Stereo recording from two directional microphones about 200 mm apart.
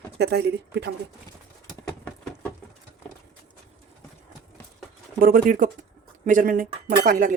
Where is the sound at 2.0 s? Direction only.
5° left (ahead or behind).